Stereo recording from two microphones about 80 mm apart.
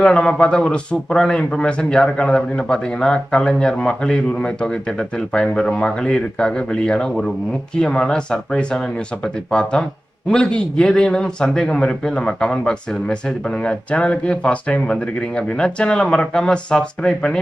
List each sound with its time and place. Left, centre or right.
0.0 s a man's voice: centre